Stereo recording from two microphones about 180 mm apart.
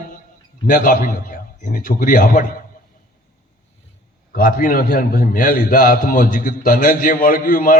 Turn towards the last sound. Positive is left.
turn(degrees=50)  # may be behind; listen again after turning